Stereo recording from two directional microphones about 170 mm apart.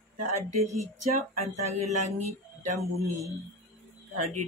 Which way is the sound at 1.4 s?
40° right (ahead or behind).